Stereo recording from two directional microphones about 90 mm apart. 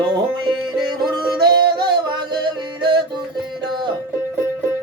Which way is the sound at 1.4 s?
55° right (ahead or behind).